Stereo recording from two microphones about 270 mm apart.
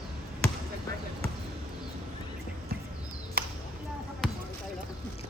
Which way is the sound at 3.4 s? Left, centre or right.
Right.